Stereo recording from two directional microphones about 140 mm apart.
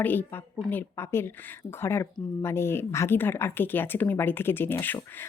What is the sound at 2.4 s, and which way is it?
Speech, 15° left (ahead or behind).